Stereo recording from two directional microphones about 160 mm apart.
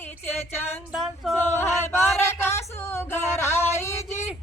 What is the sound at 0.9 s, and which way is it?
Music, centre (ahead or behind).